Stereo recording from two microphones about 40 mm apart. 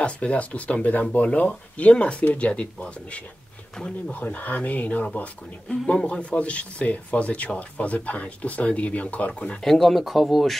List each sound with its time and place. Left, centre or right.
0.0 s speech: left
4.1 s speech: left
5.9 s speech: left
9.6 s speech: centre